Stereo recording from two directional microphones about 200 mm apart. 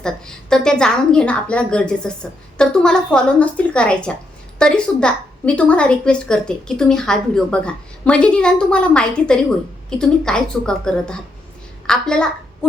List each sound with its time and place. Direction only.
0.0 s a woman's voice: 5° left (ahead or behind)